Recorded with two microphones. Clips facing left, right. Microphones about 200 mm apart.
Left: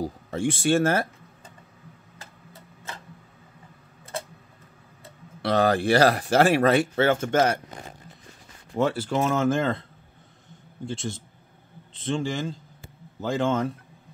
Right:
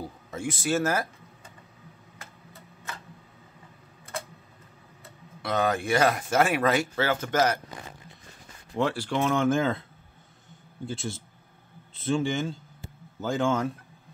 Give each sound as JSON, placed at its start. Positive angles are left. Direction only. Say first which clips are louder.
{"t": 0.0, "sound": "speech", "louder": "left 7 dB", "side_deg": 30}
{"t": 5.4, "sound": "speech", "louder": "left 5 dB", "side_deg": 35}
{"t": 8.7, "sound": "speech", "louder": "left 3 dB", "side_deg": 0}
{"t": 10.9, "sound": "speech", "louder": "left 2 dB", "side_deg": -5}